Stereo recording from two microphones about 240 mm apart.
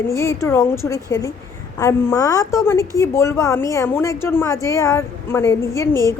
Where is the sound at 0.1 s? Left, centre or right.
Centre.